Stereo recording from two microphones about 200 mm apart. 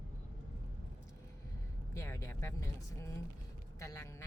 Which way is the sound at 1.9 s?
15° left (ahead or behind).